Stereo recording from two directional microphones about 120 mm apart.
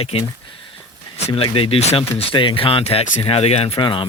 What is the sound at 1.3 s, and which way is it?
Speech, 45° left (ahead or behind).